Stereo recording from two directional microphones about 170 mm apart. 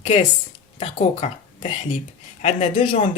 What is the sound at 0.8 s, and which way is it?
Speech, 35° left (ahead or behind).